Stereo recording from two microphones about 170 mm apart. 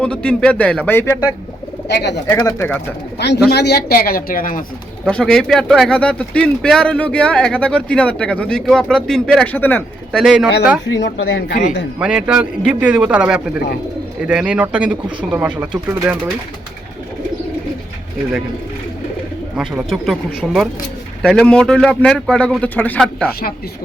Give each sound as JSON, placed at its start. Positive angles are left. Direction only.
{"t": 0.0, "sound": "speech", "side_deg": 5}
{"t": 1.9, "sound": "speech", "side_deg": 80}
{"t": 2.3, "sound": "speech", "side_deg": 20}
{"t": 3.2, "sound": "a woman's voice", "side_deg": 80}
{"t": 5.0, "sound": "speech", "side_deg": 5}
{"t": 10.2, "sound": "speech", "side_deg": -5}
{"t": 10.9, "sound": "speech", "side_deg": 90}
{"t": 11.9, "sound": "speech", "side_deg": -5}
{"t": 19.5, "sound": "speech", "side_deg": 0}